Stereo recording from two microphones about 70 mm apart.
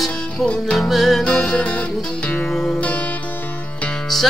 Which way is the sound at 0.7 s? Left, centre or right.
Centre.